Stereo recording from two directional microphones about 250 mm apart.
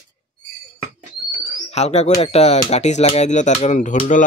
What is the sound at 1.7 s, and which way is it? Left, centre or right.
Speech, left.